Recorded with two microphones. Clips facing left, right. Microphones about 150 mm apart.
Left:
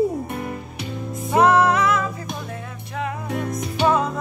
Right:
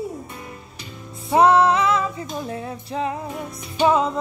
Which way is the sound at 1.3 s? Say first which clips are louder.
Right 1 dB; 25° right (ahead or behind).